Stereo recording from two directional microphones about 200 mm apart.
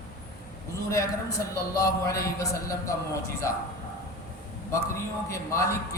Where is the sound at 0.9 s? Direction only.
15° left (ahead or behind).